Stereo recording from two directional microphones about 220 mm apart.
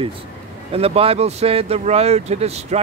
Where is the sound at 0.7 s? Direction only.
25° right (ahead or behind).